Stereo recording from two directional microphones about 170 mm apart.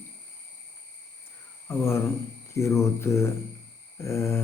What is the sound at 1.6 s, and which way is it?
Speech, 15° left (ahead or behind).